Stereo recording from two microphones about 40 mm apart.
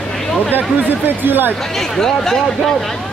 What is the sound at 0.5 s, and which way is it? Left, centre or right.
Speech, right.